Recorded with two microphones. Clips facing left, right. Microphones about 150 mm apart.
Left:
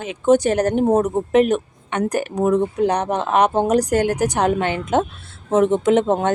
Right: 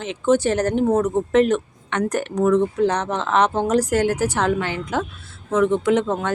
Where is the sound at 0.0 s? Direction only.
15° left (ahead or behind).